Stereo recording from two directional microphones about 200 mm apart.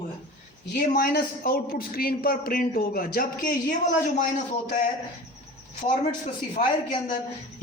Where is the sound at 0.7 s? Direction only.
45° left (ahead or behind).